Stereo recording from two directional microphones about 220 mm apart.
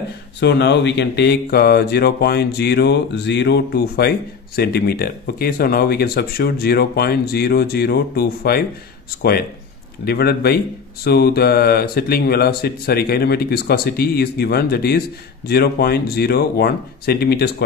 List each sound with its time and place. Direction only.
0.4 s speech: 50° left (ahead or behind)
10.0 s speech: 45° left (ahead or behind)